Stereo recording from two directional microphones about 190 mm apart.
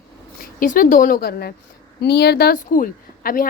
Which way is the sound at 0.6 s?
45° left (ahead or behind).